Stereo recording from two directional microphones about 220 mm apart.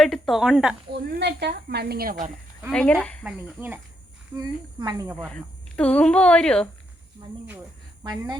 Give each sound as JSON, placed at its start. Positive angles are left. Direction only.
{"t": 0.0, "sound": "speech", "side_deg": 0}
{"t": 1.1, "sound": "speech", "side_deg": -50}
{"t": 2.6, "sound": "speech", "side_deg": 5}
{"t": 3.2, "sound": "speech", "side_deg": -5}
{"t": 5.1, "sound": "speech", "side_deg": 5}